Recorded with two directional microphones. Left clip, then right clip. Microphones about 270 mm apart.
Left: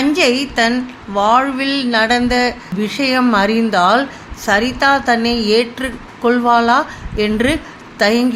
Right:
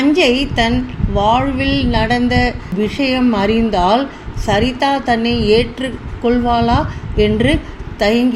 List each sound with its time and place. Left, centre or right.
0.0 s a woman's voice: centre